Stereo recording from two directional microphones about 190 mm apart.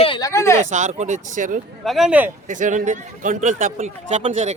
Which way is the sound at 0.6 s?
40° right (ahead or behind).